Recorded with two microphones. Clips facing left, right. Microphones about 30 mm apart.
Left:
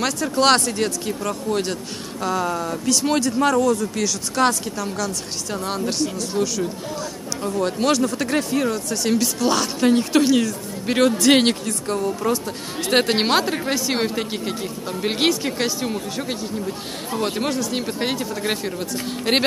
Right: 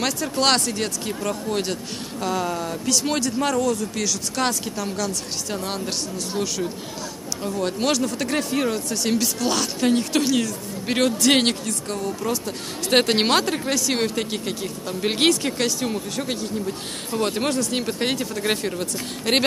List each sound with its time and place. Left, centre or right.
0.0 s speech: centre
19.3 s speech: centre